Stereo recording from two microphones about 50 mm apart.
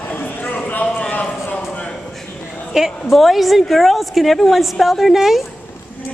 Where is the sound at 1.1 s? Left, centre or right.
Left.